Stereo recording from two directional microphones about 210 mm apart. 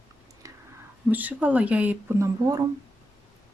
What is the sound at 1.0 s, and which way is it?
Speech, 5° right (ahead or behind).